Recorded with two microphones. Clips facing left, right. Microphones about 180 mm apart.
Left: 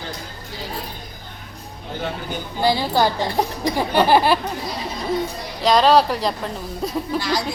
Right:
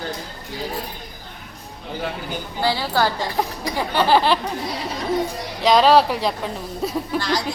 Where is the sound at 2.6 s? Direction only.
15° left (ahead or behind).